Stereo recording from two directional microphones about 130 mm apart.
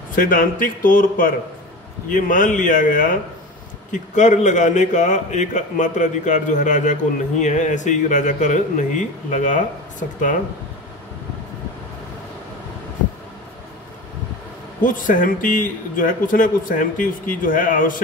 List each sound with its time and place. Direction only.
0.1 s a man's voice: 90° left
3.9 s a man's voice: 70° left (ahead or behind)
14.8 s a man's voice: 90° left